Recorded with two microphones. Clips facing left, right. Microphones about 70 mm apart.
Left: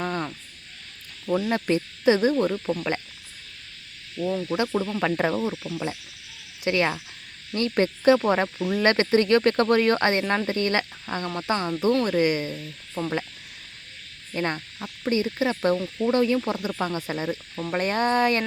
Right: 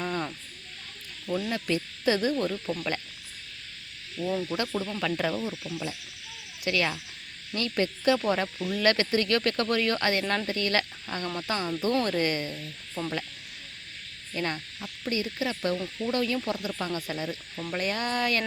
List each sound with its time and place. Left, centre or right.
0.0 s cricket: centre
1.5 s cricket: left
4.4 s cricket: left
12.0 s speech: centre
14.3 s cricket: left